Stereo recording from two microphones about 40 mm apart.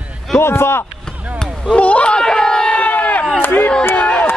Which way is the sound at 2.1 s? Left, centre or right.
Centre.